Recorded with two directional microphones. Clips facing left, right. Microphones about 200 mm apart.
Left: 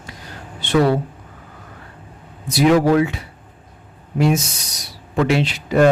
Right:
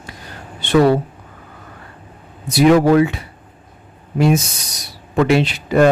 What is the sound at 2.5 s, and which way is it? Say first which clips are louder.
Speech: right 3 dB; 55° right (ahead or behind).